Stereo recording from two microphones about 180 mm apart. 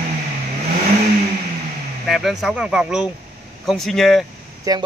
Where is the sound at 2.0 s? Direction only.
Centre (ahead or behind).